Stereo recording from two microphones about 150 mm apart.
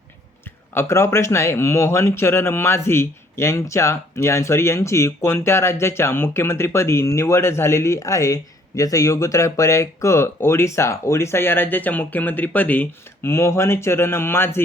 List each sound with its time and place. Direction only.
0.7 s speech: 15° left (ahead or behind)